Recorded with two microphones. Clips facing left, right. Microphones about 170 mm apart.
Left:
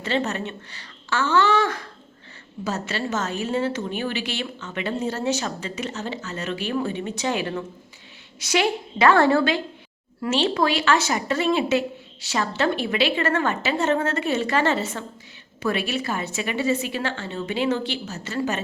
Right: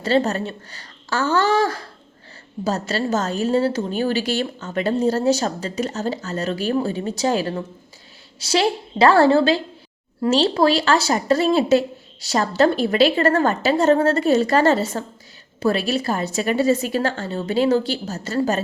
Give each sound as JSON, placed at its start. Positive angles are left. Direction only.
{"t": 0.0, "sound": "a woman's voice", "side_deg": -35}